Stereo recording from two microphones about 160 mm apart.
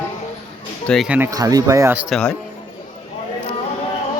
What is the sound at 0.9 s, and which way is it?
Speech, centre (ahead or behind).